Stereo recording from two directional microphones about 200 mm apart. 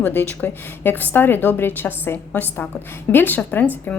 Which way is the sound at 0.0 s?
10° left (ahead or behind).